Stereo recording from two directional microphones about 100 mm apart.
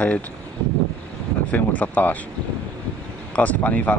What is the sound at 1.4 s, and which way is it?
Speech, 15° left (ahead or behind).